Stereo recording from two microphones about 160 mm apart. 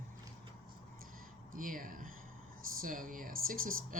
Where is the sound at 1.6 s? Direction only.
60° right (ahead or behind).